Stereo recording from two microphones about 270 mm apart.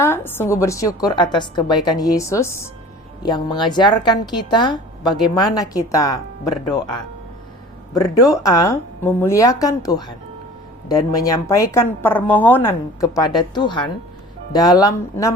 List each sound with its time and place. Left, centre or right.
0.0 s a woman's voice: centre
8.0 s a woman's voice: centre